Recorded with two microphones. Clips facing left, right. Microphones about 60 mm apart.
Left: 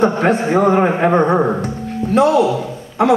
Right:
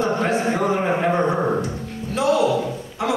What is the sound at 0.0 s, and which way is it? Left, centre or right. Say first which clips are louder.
A man's voice: left 6 dB; left.